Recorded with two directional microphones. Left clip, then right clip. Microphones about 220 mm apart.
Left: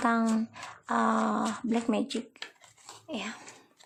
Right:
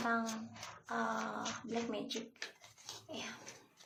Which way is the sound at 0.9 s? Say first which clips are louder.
Left 11 dB; 45° left (ahead or behind).